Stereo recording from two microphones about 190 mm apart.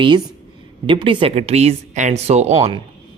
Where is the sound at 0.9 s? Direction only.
25° right (ahead or behind).